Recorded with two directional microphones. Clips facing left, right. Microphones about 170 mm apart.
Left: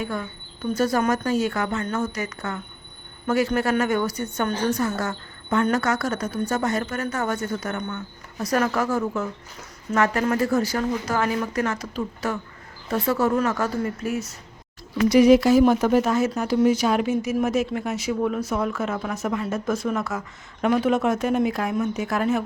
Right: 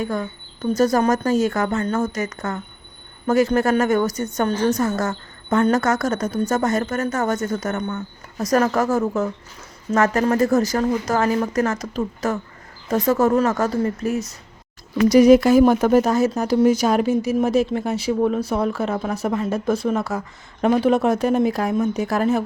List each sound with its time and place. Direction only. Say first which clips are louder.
0.0 s a woman's voice: right 4 dB; 40° right (ahead or behind)